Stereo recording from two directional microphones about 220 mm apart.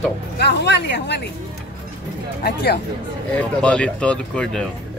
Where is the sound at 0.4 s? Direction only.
50° left (ahead or behind).